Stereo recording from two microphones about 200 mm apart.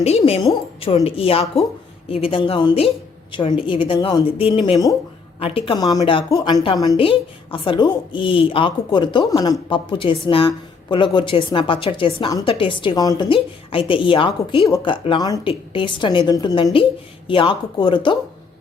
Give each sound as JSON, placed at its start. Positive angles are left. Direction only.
{"t": 0.0, "sound": "a woman's voice", "side_deg": 30}